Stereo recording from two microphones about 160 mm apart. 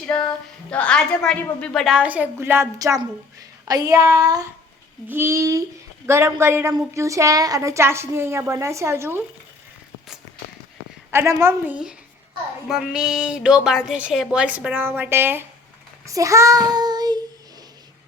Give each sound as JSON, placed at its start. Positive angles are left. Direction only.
{"t": 0.0, "sound": "female singing", "side_deg": 5}
{"t": 0.7, "sound": "a woman's voice", "side_deg": 5}
{"t": 11.1, "sound": "a woman's voice", "side_deg": -15}
{"t": 12.6, "sound": "a woman's voice", "side_deg": -5}
{"t": 16.0, "sound": "child singing", "side_deg": -20}